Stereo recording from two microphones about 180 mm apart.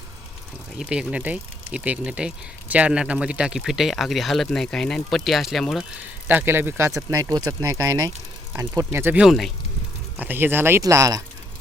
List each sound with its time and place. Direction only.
0.8 s speech: 5° right (ahead or behind)